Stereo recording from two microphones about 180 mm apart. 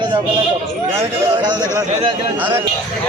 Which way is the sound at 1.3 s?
25° right (ahead or behind).